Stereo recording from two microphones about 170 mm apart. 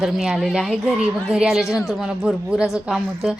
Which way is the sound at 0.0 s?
5° right (ahead or behind).